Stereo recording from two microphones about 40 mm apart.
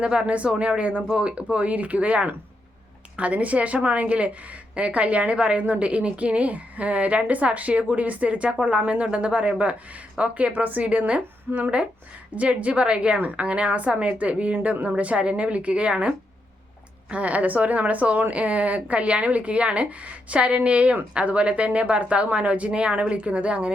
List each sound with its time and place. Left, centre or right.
0.0 s a woman's voice: right